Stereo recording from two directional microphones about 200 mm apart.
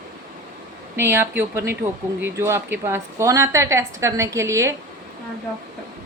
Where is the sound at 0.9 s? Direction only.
10° right (ahead or behind).